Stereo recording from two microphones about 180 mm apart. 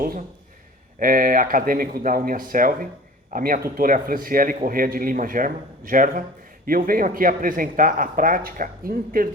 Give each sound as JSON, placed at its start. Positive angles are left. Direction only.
{"t": 0.9, "sound": "a man's voice", "side_deg": -50}